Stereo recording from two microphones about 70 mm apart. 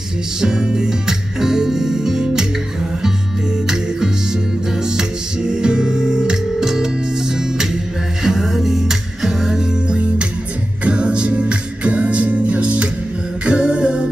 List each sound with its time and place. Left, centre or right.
0.4 s music: centre
5.5 s music: centre
8.2 s music: centre